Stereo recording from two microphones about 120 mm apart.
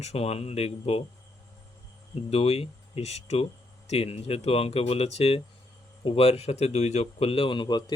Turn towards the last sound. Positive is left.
turn(degrees=35)  # may be behind; listen again after turning